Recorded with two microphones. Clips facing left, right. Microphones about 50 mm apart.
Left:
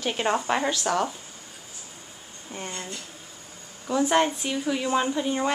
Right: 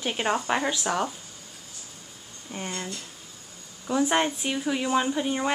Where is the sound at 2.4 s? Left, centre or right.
Centre.